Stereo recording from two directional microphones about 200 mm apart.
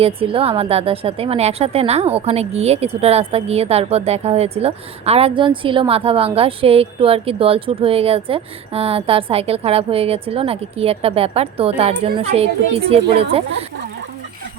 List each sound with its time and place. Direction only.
0.0 s a woman's voice: 25° right (ahead or behind)